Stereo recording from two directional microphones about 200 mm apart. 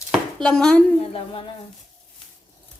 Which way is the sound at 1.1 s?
25° left (ahead or behind).